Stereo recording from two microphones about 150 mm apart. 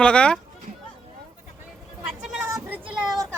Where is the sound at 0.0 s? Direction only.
5° left (ahead or behind).